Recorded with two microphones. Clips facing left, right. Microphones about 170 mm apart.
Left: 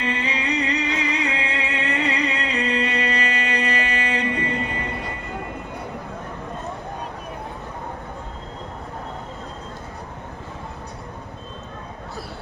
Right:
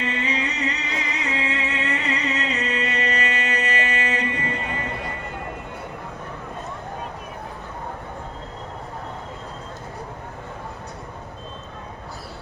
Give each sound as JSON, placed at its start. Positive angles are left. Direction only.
{"t": 0.0, "sound": "music", "side_deg": 35}